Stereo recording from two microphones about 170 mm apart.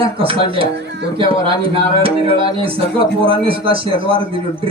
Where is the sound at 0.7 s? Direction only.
90° right.